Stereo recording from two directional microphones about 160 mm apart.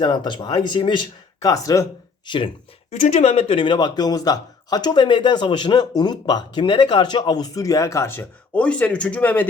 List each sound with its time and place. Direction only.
0.0 s a man's voice: 30° left (ahead or behind)
2.9 s a man's voice: 45° left (ahead or behind); by 9.5 s 10° left (ahead or behind)